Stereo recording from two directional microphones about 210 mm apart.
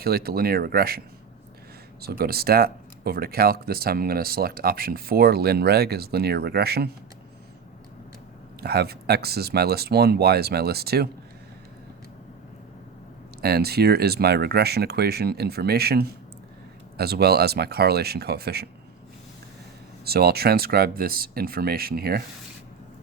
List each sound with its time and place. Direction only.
0.0 s speech: 45° right (ahead or behind)
8.6 s speech: 50° right (ahead or behind)
13.4 s speech: 50° right (ahead or behind)
20.1 s speech: 50° right (ahead or behind)